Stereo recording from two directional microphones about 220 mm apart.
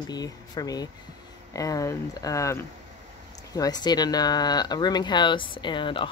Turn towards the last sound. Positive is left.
turn(degrees=20)  # may be behind; listen again after turning